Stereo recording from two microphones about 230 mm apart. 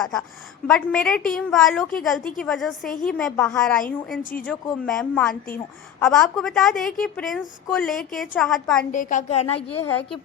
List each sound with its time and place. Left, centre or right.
0.0 s a woman's voice: centre
4.2 s a woman's voice: left
4.4 s a woman's voice: centre
8.9 s a woman's voice: left
9.6 s a woman's voice: centre